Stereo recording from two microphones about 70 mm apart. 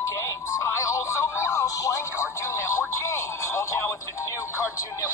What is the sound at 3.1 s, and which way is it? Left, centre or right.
Speech, left.